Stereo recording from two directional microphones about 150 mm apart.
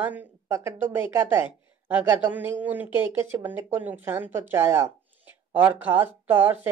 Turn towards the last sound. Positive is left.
turn(degrees=-15)  # may be behind; listen again after turning